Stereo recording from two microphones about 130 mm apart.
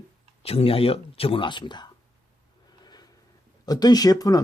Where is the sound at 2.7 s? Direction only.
30° left (ahead or behind).